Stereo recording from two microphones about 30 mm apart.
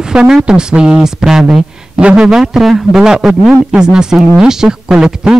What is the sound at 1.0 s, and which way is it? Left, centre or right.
Speech, centre.